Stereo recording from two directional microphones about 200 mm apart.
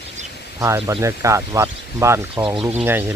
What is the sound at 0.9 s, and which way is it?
Speech, 15° right (ahead or behind).